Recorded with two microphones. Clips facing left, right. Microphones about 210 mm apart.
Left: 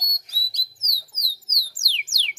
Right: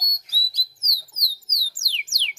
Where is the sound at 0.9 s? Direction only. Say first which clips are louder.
Even; 15° right (ahead or behind).